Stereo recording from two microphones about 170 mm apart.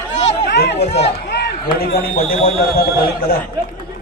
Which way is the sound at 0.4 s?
70° left (ahead or behind).